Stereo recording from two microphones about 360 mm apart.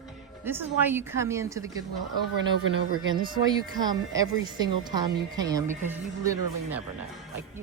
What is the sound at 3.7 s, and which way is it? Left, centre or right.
A woman's voice, centre.